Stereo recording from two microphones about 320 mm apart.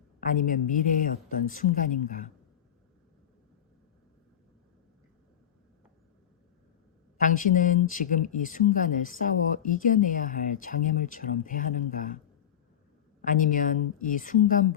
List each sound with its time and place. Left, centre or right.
0.2 s speech: left
7.2 s speech: left
13.2 s speech: left